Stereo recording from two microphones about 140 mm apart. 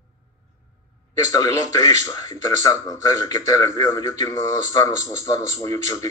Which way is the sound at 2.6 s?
25° left (ahead or behind).